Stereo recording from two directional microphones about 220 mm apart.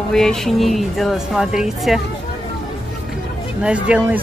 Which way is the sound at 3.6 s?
5° right (ahead or behind).